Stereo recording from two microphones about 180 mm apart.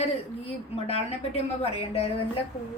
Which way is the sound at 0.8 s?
35° left (ahead or behind).